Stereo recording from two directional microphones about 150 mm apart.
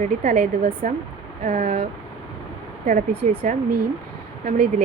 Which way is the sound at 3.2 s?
60° right (ahead or behind).